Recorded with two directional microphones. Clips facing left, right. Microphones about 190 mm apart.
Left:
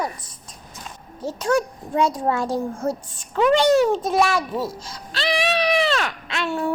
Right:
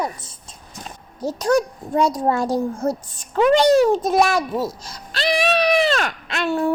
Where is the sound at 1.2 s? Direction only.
40° right (ahead or behind).